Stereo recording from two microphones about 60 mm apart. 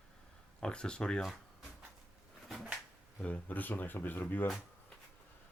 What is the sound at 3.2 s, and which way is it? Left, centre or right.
Speech, left.